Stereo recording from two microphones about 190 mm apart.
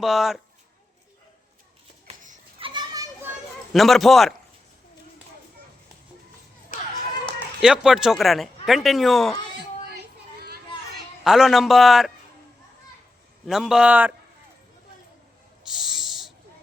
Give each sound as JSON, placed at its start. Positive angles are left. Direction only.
{"t": 0.0, "sound": "speech", "side_deg": 0}
{"t": 2.0, "sound": "a sound", "side_deg": -40}
{"t": 2.6, "sound": "children playing", "side_deg": -25}
{"t": 3.7, "sound": "speech", "side_deg": 0}
{"t": 7.6, "sound": "speech", "side_deg": -5}
{"t": 10.0, "sound": "a sound", "side_deg": -55}
{"t": 11.2, "sound": "speech", "side_deg": 0}
{"t": 13.5, "sound": "speech", "side_deg": -5}
{"t": 15.6, "sound": "owl", "side_deg": 0}